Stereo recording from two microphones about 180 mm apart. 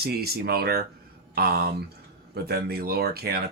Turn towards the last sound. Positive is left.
turn(degrees=-60)  # may be behind; listen again after turning